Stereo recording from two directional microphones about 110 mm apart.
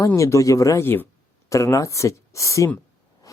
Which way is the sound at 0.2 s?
30° left (ahead or behind).